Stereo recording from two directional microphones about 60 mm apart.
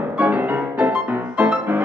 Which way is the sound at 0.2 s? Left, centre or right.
Right.